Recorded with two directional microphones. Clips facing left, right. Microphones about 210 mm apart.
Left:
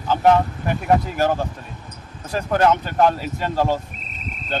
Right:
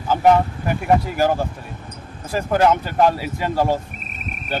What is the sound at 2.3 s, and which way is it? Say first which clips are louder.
Speech: right 1 dB; 10° right (ahead or behind).